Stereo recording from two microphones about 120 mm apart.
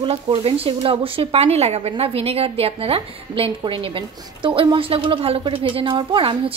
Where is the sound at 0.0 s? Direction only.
50° right (ahead or behind).